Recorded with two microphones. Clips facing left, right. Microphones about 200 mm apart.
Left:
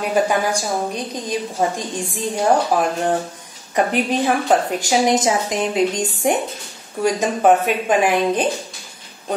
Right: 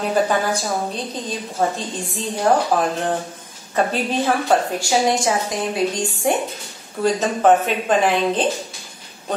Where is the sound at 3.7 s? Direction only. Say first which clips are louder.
Left 2 dB; 15° left (ahead or behind).